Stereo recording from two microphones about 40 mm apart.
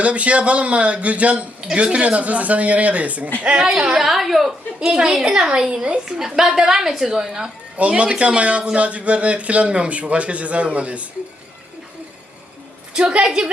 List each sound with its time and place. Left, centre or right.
0.0 s speech: right
3.9 s a woman's voice: centre
4.9 s a woman's voice: centre
7.8 s speech: right
12.9 s a woman's voice: right